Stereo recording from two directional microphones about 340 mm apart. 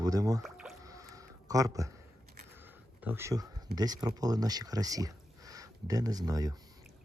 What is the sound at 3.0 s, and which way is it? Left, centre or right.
Speech, centre.